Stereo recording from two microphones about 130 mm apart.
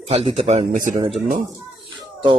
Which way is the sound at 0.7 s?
80° right.